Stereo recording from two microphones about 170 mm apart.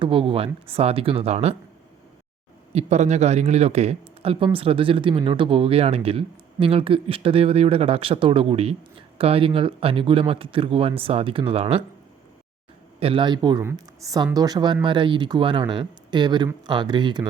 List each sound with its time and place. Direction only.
0.0 s speech: 30° right (ahead or behind)
2.7 s speech: 40° right (ahead or behind)
13.0 s speech: 30° right (ahead or behind)